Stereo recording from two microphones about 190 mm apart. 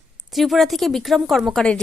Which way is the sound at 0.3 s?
Centre (ahead or behind).